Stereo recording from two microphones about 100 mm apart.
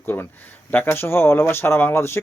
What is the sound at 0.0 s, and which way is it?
Speech, 20° left (ahead or behind).